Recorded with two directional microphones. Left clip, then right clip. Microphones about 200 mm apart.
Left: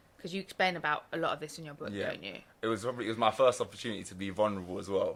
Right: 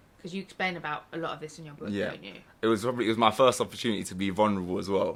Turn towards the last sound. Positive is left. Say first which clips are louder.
# right 4 dB
turn(degrees=-20)  # may be behind; listen again after turning